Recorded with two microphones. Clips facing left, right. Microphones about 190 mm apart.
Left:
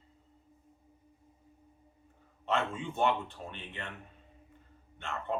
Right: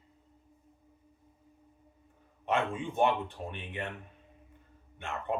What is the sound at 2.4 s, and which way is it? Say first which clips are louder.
A man's voice: right 2 dB; 15° right (ahead or behind).